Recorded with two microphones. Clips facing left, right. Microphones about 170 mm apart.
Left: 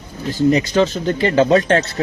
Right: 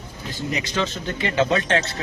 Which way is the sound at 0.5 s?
40° left (ahead or behind).